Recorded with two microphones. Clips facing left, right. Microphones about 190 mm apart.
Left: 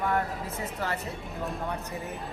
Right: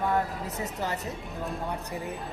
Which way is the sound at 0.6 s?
20° right (ahead or behind).